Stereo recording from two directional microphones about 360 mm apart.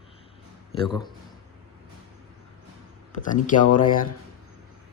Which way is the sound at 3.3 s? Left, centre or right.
Left.